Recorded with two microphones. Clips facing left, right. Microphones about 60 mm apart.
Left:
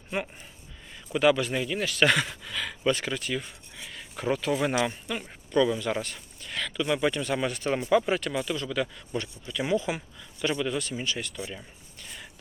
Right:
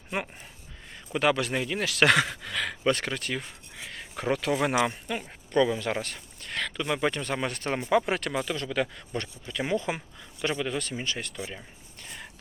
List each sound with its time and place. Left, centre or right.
0.9 s a sound: right
1.5 s speech: right
1.8 s speech: right
4.7 s speech: right
5.0 s speech: right
6.8 s speech: right
7.8 s speech: right
8.0 s speech: right
8.3 s speech: right
11.0 s speech: right
11.3 s speech: right